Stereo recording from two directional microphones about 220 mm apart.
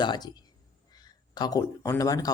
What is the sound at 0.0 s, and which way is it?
Speech, 20° left (ahead or behind).